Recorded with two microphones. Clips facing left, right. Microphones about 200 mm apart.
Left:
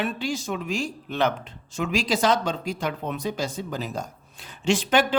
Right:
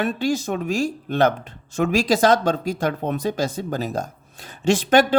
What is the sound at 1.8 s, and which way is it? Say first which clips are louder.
Speech: right 5 dB; 45° right (ahead or behind).